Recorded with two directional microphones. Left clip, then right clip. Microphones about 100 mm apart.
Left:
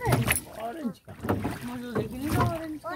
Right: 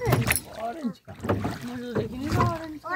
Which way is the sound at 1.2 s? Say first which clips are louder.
Right 2 dB; 90° right.